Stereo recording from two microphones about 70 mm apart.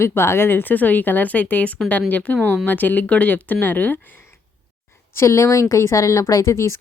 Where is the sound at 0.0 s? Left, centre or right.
Left.